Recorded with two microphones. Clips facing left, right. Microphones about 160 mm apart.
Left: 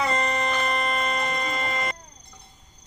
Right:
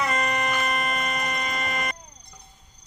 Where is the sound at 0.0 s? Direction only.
25° left (ahead or behind).